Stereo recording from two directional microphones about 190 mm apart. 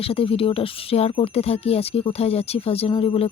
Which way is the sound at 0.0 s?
30° left (ahead or behind).